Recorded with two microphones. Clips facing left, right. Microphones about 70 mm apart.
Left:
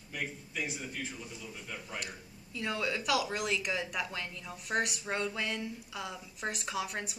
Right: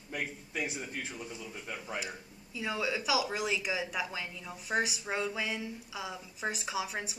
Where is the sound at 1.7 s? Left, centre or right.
Centre.